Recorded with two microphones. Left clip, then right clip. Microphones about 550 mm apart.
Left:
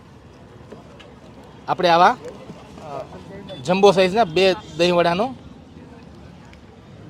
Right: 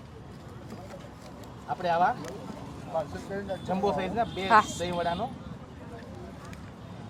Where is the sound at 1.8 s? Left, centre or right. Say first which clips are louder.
Left 11 dB; left.